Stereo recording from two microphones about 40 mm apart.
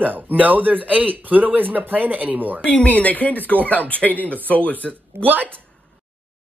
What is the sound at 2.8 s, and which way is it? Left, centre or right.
Speech, left.